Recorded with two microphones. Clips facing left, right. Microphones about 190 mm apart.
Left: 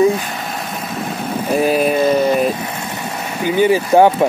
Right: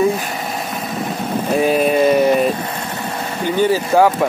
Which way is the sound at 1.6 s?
Centre (ahead or behind).